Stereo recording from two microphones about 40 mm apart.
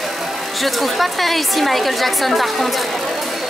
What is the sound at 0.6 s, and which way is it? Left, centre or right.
A woman's voice, centre.